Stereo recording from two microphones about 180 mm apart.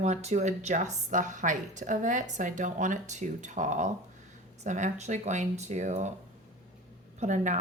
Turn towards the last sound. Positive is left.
turn(degrees=-45)  # may be behind; listen again after turning